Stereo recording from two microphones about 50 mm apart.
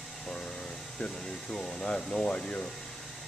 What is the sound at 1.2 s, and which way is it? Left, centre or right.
Speech, centre.